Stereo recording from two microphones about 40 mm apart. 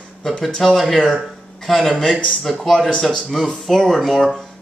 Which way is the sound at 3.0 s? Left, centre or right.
Centre.